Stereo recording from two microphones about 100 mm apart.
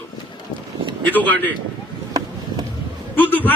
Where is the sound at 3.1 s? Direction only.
15° left (ahead or behind).